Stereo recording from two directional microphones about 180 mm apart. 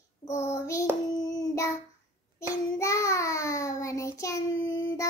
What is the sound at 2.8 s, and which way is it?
Child singing, 15° left (ahead or behind).